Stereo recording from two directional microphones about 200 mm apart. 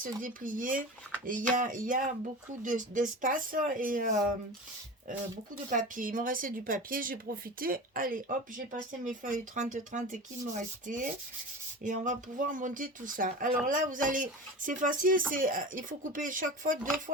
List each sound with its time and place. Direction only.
0.0 s speech: 40° right (ahead or behind)
5.7 s speech: 45° right (ahead or behind)